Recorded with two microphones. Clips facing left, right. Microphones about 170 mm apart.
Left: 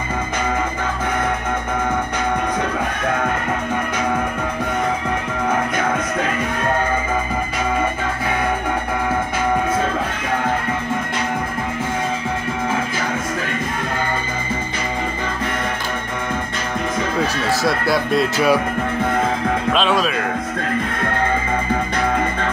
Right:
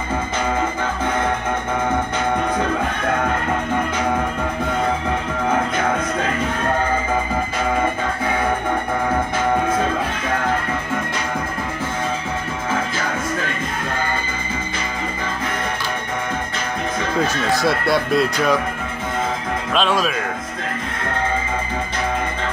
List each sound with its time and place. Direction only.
17.5 s speech: centre (ahead or behind)
19.7 s speech: centre (ahead or behind)